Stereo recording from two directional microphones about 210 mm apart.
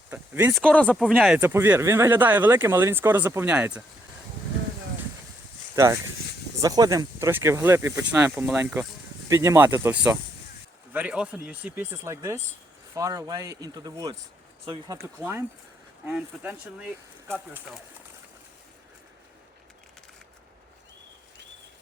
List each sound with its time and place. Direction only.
0.1 s speech: 10° right (ahead or behind)
0.6 s speech: 5° left (ahead or behind)
5.7 s speech: 15° right (ahead or behind)
15.0 s speech: 10° right (ahead or behind)